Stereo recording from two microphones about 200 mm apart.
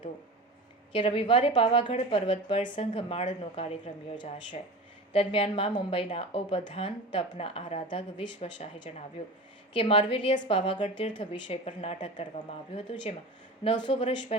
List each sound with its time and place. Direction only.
0.9 s a woman's voice: 25° left (ahead or behind)